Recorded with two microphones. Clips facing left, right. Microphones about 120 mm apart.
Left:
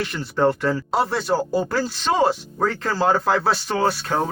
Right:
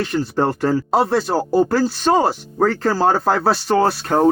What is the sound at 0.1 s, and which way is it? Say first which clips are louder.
Speech: right 1 dB; 40° right (ahead or behind).